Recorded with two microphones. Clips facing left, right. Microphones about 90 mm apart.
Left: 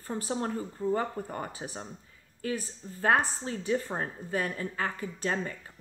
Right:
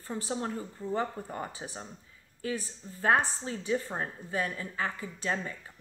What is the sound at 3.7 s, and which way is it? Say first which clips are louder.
Speech: left 1 dB; 40° left (ahead or behind).